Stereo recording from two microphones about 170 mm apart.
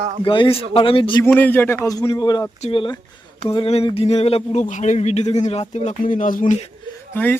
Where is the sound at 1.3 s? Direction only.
10° left (ahead or behind); by 6.5 s 50° left (ahead or behind).